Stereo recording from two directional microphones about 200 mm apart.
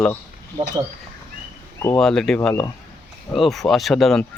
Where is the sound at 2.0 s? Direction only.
5° left (ahead or behind).